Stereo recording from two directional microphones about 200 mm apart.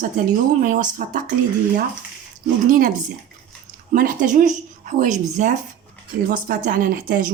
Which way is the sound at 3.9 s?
40° right (ahead or behind).